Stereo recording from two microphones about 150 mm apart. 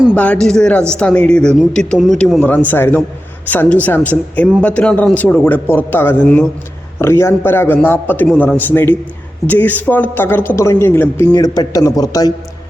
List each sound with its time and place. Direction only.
0.1 s speech: 10° left (ahead or behind)
11.3 s speech: 25° left (ahead or behind)